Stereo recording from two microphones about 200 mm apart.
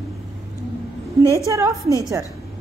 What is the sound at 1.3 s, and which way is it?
Speech, 15° right (ahead or behind).